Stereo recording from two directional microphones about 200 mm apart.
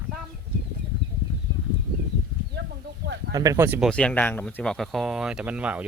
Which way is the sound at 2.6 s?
60° right (ahead or behind).